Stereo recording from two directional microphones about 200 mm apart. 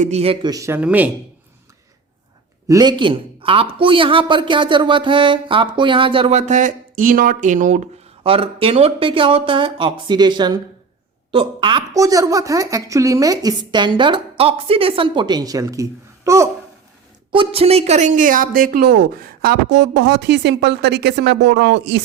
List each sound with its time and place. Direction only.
0.0 s speech: 30° right (ahead or behind); by 1.1 s 5° right (ahead or behind)
2.6 s speech: 20° right (ahead or behind)
17.3 s speech: 25° right (ahead or behind); by 22.0 s 60° right (ahead or behind)